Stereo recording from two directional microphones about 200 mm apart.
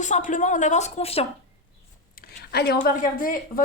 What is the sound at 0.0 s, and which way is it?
Speech, 40° left (ahead or behind).